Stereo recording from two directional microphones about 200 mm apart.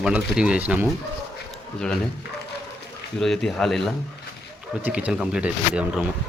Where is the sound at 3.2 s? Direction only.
Centre (ahead or behind).